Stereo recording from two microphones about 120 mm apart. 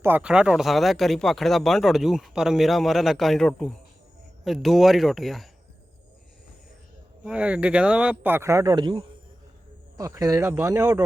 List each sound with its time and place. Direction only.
0.0 s speech: 15° right (ahead or behind)
7.3 s speech: 10° right (ahead or behind); by 8.7 s 25° right (ahead or behind)
8.7 s a man's voice: 40° right (ahead or behind)
10.0 s speech: 30° right (ahead or behind)